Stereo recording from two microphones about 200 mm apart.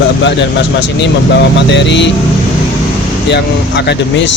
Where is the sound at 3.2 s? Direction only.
60° left (ahead or behind).